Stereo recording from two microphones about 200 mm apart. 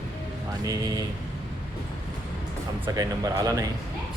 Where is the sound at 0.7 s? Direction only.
20° right (ahead or behind).